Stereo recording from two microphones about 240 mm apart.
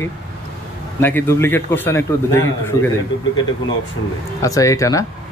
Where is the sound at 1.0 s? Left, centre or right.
Centre.